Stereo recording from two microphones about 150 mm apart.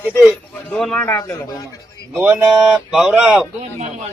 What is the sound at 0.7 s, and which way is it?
Speech, 5° left (ahead or behind).